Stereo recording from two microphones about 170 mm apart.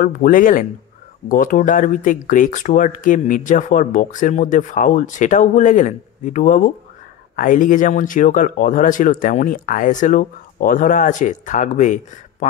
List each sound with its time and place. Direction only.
0.0 s speech: 55° left (ahead or behind)